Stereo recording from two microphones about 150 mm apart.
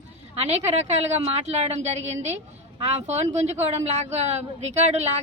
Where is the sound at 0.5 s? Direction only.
45° right (ahead or behind).